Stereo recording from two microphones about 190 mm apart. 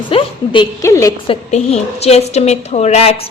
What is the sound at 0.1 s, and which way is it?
A woman's voice, 25° left (ahead or behind).